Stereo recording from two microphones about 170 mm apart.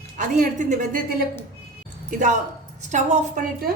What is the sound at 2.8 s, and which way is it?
Speech, 45° right (ahead or behind).